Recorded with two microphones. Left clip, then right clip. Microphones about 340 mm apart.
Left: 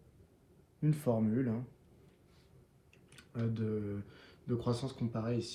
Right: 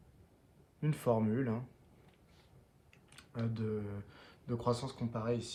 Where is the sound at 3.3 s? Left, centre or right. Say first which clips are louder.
Left 1 dB; centre.